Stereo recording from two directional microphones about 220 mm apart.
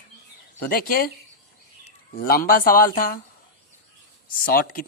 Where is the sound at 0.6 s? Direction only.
40° left (ahead or behind).